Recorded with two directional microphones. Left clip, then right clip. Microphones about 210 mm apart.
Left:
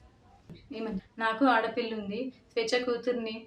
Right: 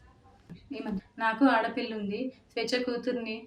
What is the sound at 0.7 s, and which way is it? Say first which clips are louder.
A woman's voice: even; 5° left (ahead or behind).